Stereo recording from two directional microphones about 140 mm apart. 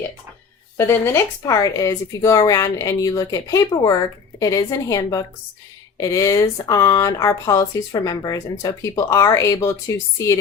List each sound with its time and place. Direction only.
0.8 s speech: 15° left (ahead or behind)